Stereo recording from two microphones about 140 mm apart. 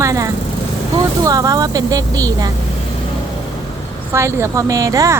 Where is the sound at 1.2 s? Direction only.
25° right (ahead or behind).